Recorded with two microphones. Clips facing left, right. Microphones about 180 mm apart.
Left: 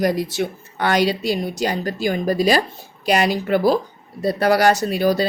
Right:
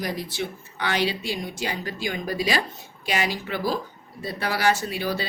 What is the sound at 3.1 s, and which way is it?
Speech, 60° left (ahead or behind).